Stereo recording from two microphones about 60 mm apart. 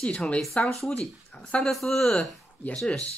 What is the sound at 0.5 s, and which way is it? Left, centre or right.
Speech, centre.